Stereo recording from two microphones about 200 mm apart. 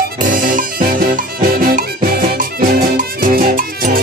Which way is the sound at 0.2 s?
45° right (ahead or behind).